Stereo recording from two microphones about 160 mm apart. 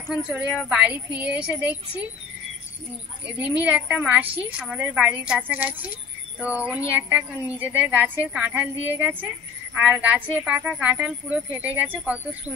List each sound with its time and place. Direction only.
0.1 s a woman's voice: 5° right (ahead or behind)
3.6 s a woman's voice: 5° right (ahead or behind)